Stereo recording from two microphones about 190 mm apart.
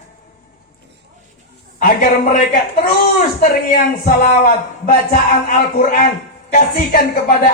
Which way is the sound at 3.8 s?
45° left (ahead or behind).